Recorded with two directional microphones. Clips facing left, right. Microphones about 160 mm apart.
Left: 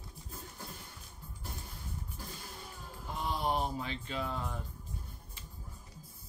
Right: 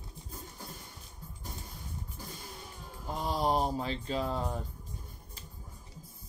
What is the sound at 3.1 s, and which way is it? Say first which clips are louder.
Speech: right 4 dB; 40° right (ahead or behind).